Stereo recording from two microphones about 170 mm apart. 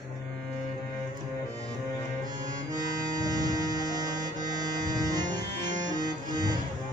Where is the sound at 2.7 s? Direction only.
25° right (ahead or behind).